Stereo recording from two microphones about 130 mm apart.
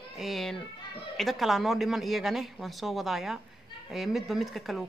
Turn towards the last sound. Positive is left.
turn(degrees=0)  # may be behind; listen again after turning